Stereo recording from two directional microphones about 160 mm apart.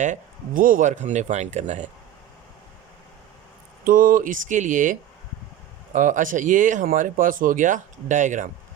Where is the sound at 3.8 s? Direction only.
60° right (ahead or behind).